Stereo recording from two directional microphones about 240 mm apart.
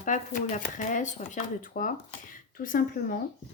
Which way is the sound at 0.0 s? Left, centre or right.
Left.